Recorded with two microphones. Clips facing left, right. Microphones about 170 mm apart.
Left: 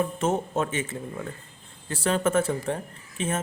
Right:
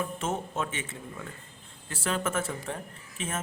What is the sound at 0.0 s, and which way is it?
Speech, 40° left (ahead or behind).